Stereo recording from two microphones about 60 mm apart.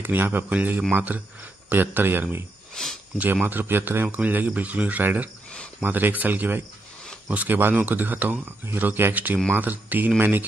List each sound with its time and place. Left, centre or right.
0.0 s speech: right
2.7 s speech: centre
3.2 s speech: right